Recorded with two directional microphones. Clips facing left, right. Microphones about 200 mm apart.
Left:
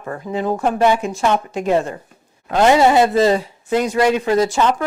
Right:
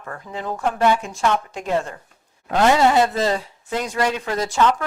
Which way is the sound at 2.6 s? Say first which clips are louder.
Left 4 dB; 15° left (ahead or behind).